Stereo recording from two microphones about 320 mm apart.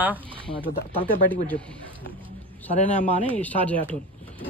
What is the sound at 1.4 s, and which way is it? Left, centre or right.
Speech, centre.